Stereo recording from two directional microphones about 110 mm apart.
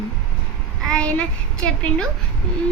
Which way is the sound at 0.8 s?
10° left (ahead or behind).